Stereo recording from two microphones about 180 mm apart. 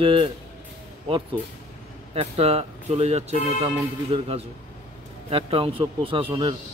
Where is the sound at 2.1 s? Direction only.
35° right (ahead or behind).